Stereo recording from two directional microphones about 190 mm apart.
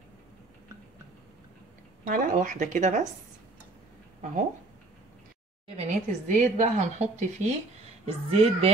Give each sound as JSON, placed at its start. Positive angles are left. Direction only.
{"t": 2.0, "sound": "speech", "side_deg": -45}
{"t": 4.2, "sound": "speech", "side_deg": -45}
{"t": 5.8, "sound": "speech", "side_deg": -40}